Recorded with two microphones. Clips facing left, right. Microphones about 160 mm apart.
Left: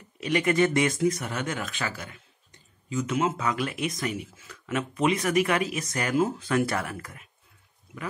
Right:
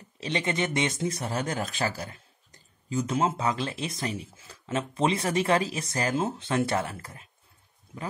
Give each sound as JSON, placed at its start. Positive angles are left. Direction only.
{"t": 0.2, "sound": "speech", "side_deg": -25}